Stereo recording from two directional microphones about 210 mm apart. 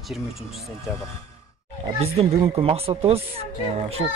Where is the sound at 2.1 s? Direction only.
30° right (ahead or behind).